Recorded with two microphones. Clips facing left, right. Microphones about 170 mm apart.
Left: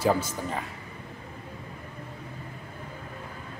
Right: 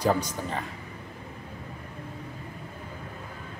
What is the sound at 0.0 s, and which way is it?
Speech, 5° left (ahead or behind).